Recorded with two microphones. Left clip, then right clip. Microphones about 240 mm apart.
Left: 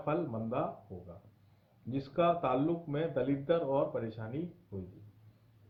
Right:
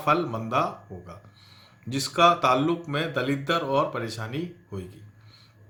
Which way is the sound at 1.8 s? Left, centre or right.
Centre.